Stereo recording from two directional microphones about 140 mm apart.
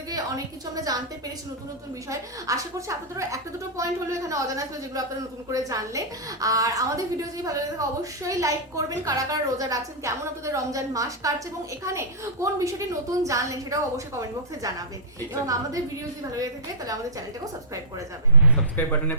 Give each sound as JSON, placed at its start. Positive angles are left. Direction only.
{"t": 2.0, "sound": "a woman's voice", "side_deg": -25}
{"t": 18.8, "sound": "speech", "side_deg": 15}